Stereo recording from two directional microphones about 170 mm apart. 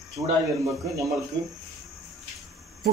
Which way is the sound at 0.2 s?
20° right (ahead or behind).